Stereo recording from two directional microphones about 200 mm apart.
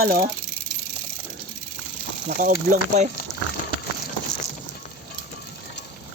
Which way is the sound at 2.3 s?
40° right (ahead or behind).